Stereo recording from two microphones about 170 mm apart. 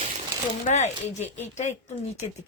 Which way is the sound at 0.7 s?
40° left (ahead or behind).